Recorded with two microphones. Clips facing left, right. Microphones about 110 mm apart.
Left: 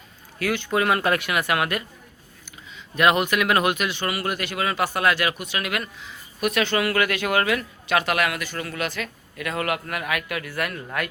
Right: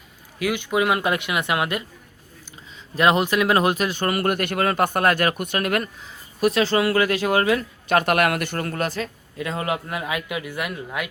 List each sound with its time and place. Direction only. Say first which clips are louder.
0.3 s speech: right 1 dB; 15° right (ahead or behind)
2.9 s speech: right 1 dB; 30° right (ahead or behind)
7.9 s speech: right 4 dB; 45° right (ahead or behind)
9.4 s a man's voice: right 1 dB; 25° right (ahead or behind)